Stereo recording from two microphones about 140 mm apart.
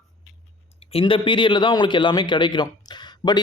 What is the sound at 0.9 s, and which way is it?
A man's voice, 40° left (ahead or behind).